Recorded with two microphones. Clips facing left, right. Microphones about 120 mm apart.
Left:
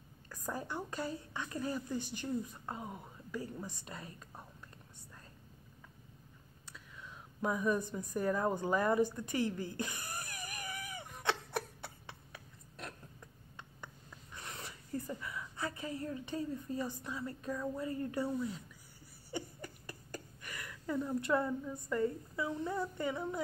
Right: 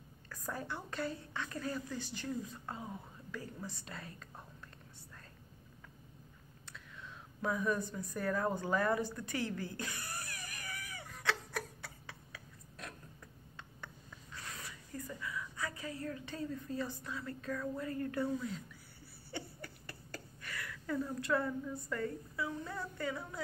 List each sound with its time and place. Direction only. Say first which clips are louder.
0.3 s a woman's voice: left 1 dB; 15° left (ahead or behind)
7.4 s a sound: left 2 dB; 15° left (ahead or behind)
14.3 s speech: left 1 dB; 25° left (ahead or behind)